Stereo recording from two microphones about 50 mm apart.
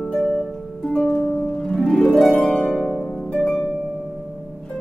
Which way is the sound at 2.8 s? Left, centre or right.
Centre.